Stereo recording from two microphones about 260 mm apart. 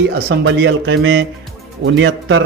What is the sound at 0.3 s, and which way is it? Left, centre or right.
Speech, right.